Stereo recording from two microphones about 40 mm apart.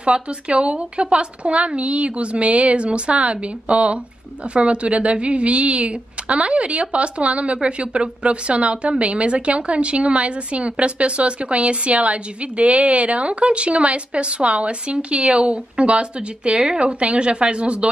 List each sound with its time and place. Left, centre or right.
0.0 s a woman's voice: right